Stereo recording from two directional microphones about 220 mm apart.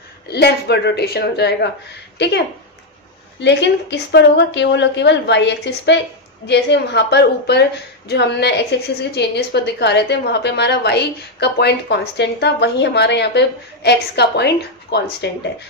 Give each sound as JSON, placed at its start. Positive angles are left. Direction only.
{"t": 0.3, "sound": "a woman's voice", "side_deg": 50}